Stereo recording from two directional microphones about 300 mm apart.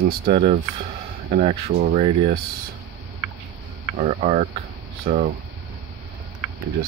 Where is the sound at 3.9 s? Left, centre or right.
Right.